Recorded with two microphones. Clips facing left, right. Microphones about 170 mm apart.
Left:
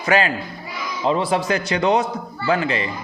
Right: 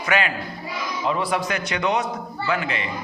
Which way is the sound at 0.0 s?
35° left (ahead or behind).